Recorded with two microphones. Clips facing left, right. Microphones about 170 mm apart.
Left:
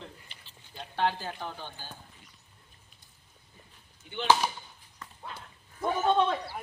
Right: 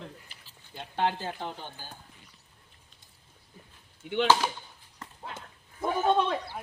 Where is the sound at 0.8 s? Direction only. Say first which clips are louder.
Right 1 dB; 20° right (ahead or behind).